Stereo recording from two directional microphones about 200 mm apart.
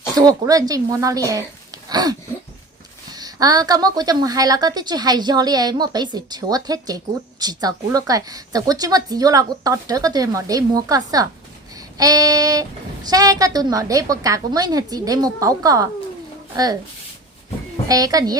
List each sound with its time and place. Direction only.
0.2 s a woman's voice: 20° right (ahead or behind)
17.8 s a woman's voice: 20° right (ahead or behind)